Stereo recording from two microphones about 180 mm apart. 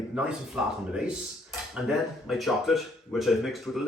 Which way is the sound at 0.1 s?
5° right (ahead or behind).